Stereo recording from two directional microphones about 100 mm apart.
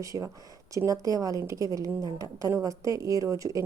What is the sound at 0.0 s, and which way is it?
A woman's voice, 35° right (ahead or behind).